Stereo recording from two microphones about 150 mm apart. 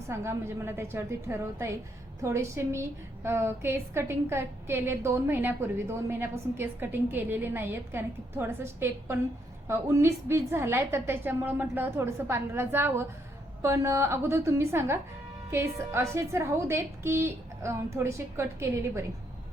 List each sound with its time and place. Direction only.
0.1 s a woman's voice: 15° right (ahead or behind)